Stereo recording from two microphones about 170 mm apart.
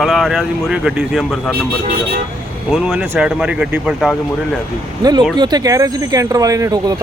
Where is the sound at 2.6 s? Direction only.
5° right (ahead or behind).